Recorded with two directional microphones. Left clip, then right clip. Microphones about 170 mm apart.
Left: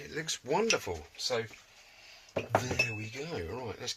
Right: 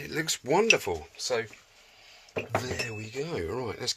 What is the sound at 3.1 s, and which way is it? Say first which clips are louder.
Speech: right 6 dB; 55° right (ahead or behind).